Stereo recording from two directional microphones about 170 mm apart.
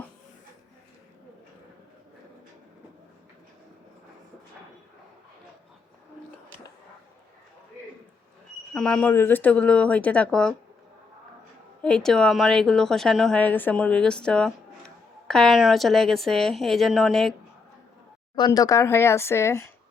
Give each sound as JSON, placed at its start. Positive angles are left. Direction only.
{"t": 8.7, "sound": "speech", "side_deg": 5}
{"t": 11.8, "sound": "speech", "side_deg": 5}
{"t": 18.3, "sound": "speech", "side_deg": 25}